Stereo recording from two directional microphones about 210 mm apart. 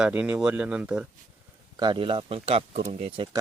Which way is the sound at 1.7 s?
20° right (ahead or behind).